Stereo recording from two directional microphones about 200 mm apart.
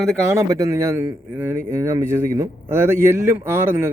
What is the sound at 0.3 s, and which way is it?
A man's voice, 15° right (ahead or behind).